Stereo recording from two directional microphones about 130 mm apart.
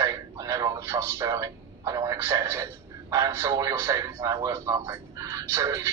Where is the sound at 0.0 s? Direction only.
25° right (ahead or behind).